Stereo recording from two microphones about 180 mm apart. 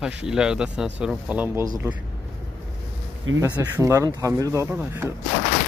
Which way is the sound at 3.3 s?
90° right.